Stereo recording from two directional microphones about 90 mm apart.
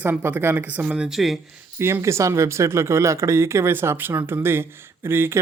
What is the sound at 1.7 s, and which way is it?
Speech, 30° right (ahead or behind).